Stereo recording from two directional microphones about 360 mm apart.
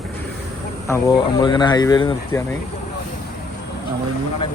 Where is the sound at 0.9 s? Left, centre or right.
Centre.